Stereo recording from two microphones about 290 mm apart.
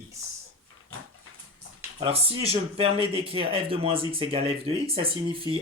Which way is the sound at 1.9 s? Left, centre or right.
Centre.